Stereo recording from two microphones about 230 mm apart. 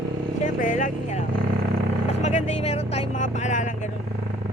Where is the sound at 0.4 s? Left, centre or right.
Left.